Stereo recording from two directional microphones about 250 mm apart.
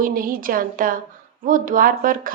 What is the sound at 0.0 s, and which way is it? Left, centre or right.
A woman's voice, right.